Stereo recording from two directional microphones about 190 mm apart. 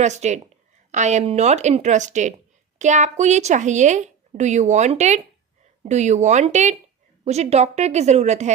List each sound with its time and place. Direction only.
0.0 s a woman's voice: 35° right (ahead or behind)